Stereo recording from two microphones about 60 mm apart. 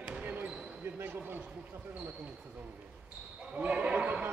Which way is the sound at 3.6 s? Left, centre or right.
Right.